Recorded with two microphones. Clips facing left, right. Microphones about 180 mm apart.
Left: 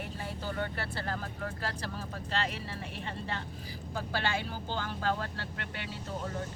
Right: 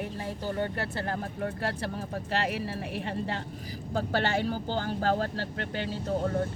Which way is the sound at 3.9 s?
45° right (ahead or behind).